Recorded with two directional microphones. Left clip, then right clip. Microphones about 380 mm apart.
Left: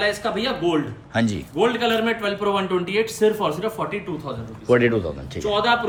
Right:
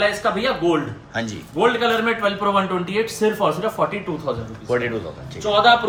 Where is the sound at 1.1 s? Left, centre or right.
Centre.